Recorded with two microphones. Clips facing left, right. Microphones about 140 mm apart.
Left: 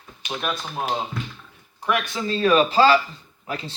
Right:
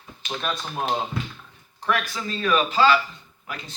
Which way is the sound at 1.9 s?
30° left (ahead or behind).